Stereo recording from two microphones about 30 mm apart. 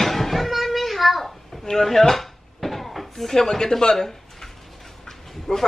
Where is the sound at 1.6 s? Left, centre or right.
Centre.